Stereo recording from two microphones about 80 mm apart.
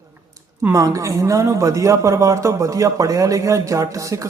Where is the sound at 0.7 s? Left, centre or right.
Right.